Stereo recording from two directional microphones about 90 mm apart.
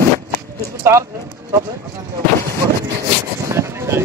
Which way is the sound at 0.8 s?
30° right (ahead or behind).